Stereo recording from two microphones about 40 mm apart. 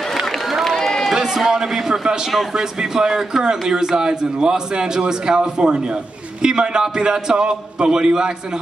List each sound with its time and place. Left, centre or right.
0.7 s run: centre
1.1 s a man's voice: centre